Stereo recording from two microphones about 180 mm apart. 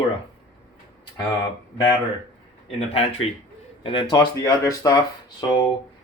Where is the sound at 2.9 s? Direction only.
35° left (ahead or behind); by 4.9 s 20° left (ahead or behind).